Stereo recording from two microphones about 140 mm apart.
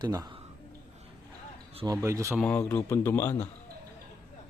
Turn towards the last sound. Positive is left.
turn(degrees=20)  # may be behind; listen again after turning